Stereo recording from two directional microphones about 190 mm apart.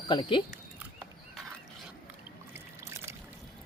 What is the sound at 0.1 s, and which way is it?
Speech, 25° left (ahead or behind).